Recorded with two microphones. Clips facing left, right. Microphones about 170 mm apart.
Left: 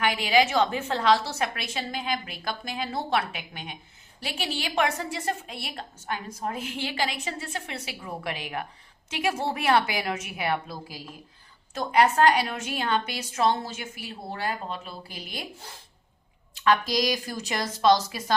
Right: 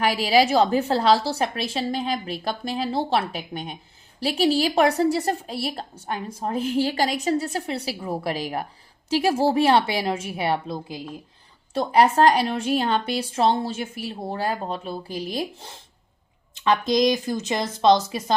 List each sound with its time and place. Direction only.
0.0 s a woman's voice: 35° right (ahead or behind)